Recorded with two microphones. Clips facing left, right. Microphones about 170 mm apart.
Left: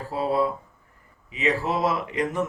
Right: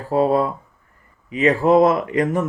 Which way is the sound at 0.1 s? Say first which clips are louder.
Right 7 dB; 50° right (ahead or behind).